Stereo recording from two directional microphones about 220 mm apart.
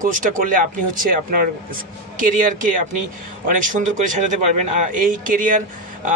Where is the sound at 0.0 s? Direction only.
40° right (ahead or behind).